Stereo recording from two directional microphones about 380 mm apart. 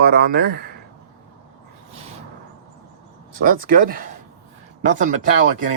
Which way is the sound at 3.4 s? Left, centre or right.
Right.